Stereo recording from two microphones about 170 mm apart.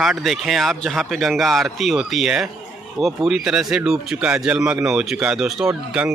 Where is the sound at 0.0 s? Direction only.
Centre (ahead or behind).